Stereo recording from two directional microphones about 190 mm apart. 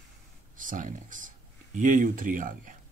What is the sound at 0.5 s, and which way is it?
Speech, 45° right (ahead or behind).